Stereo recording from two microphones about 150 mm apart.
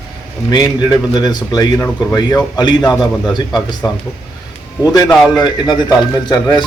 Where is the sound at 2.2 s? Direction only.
25° left (ahead or behind).